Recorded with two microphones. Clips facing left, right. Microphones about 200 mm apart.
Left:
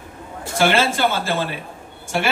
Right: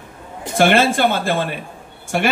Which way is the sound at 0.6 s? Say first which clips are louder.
Right 3 dB; 55° right (ahead or behind).